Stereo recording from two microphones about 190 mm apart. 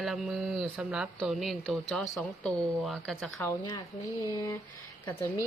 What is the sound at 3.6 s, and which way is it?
Speech, 20° left (ahead or behind).